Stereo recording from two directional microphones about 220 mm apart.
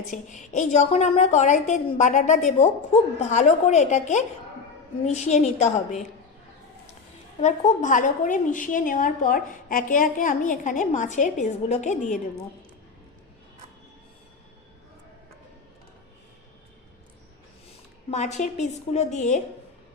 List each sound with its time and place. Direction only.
0.1 s a woman's voice: 35° left (ahead or behind)
7.4 s a woman's voice: 35° left (ahead or behind)
18.1 s a woman's voice: 30° left (ahead or behind)